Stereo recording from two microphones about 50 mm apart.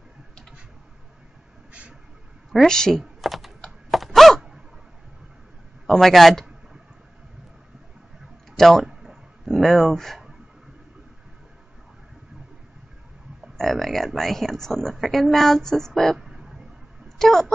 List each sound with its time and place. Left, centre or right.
1.7 s vehicle: right
2.6 s a woman's voice: centre
3.0 s typing: centre
3.9 s a sound: centre
5.9 s speech: centre
8.5 s speech: centre
8.8 s a sound: centre
9.5 s speech: centre
13.6 s speech: centre
16.2 s a sound: centre
17.2 s speech: centre